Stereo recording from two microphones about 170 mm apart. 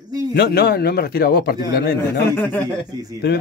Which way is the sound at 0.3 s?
65° left (ahead or behind).